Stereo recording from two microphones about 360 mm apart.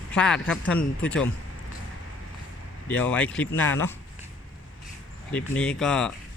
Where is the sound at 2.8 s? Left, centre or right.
Centre.